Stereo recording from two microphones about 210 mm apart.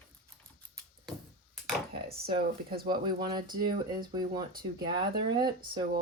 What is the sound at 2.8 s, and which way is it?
Speech, 20° right (ahead or behind).